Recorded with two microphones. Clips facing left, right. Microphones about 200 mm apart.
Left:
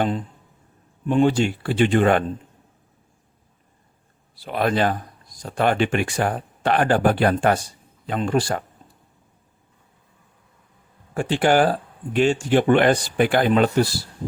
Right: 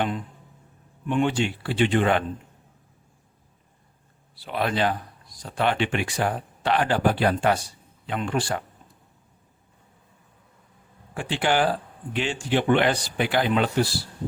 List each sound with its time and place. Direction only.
1.0 s speech: 35° left (ahead or behind)
4.4 s speech: 45° left (ahead or behind)
11.1 s speech: 45° left (ahead or behind)